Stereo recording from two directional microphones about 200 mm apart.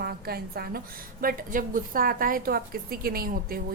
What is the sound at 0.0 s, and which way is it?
A woman's voice, 50° right (ahead or behind).